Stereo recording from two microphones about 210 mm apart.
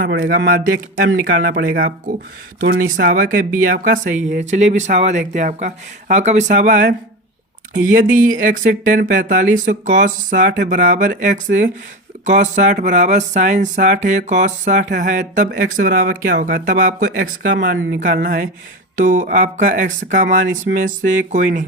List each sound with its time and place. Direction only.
0.0 s speech: 55° right (ahead or behind)
2.9 s speech: 45° right (ahead or behind)
10.5 s speech: 55° right (ahead or behind)
10.8 s speech: 40° right (ahead or behind)
11.5 s speech: 50° right (ahead or behind)
12.2 s speech: 35° right (ahead or behind)
17.2 s speech: 65° right (ahead or behind)
17.7 s speech: 40° right (ahead or behind)